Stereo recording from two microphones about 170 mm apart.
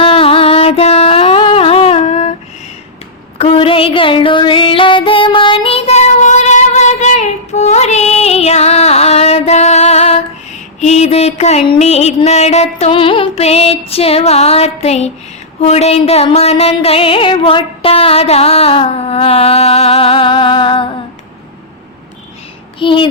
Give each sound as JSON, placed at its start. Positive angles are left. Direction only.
{"t": 0.0, "sound": "music", "side_deg": 35}
{"t": 3.3, "sound": "music", "side_deg": 35}
{"t": 22.8, "sound": "speech", "side_deg": 30}